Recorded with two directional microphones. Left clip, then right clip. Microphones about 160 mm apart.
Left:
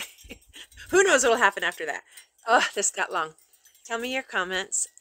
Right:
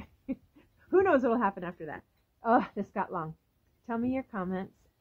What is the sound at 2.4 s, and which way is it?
A woman's voice, 15° left (ahead or behind).